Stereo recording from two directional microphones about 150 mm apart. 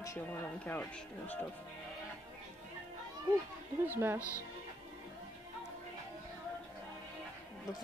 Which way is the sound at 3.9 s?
15° right (ahead or behind).